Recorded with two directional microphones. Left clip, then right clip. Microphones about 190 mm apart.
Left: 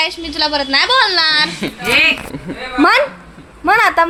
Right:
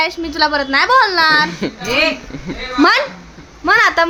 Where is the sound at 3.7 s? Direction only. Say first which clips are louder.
Even; 5° left (ahead or behind).